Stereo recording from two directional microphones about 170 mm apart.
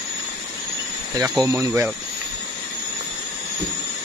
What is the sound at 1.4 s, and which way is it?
Speech, 15° right (ahead or behind).